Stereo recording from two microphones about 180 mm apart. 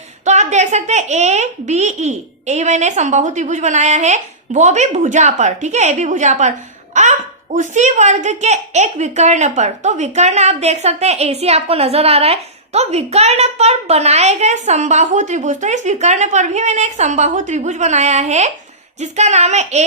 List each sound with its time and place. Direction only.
0.3 s a child's voice: 40° right (ahead or behind)